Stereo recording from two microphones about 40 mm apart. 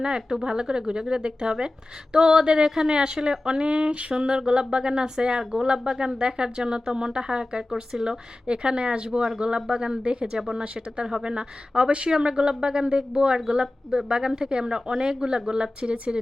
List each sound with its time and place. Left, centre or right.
0.0 s speech: centre
10.3 s speech: centre
10.6 s speech: right
12.1 s speech: centre